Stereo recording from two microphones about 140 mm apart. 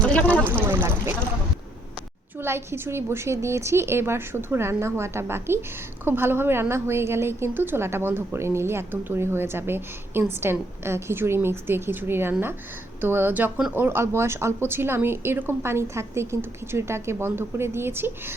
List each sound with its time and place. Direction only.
0.0 s a sound: 10° left (ahead or behind)
0.4 s speech: 15° right (ahead or behind)
2.4 s a woman's voice: 15° right (ahead or behind)